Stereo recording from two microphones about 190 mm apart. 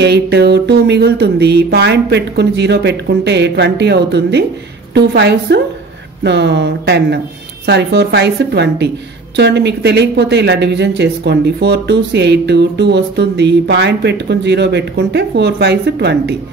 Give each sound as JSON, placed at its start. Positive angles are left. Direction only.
{"t": 0.0, "sound": "speech", "side_deg": -60}